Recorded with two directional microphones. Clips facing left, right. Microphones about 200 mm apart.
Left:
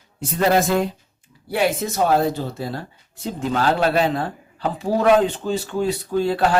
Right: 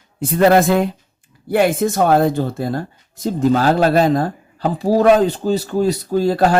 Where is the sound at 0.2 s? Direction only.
60° right (ahead or behind).